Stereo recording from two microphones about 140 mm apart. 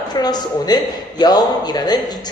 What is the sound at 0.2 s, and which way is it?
A woman's voice, 30° left (ahead or behind).